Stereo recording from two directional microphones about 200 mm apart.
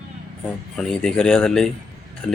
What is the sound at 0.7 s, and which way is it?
Speech, 5° left (ahead or behind).